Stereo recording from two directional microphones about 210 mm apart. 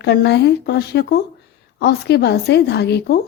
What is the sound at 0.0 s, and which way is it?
A woman's voice, 55° left (ahead or behind).